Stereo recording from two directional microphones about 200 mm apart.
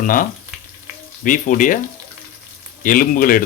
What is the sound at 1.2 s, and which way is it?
Speech, 40° left (ahead or behind).